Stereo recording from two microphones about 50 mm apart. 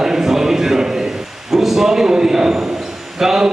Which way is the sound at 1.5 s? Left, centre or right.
Centre.